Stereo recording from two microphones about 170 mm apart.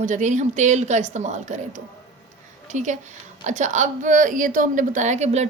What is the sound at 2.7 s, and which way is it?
A woman's voice, 45° right (ahead or behind).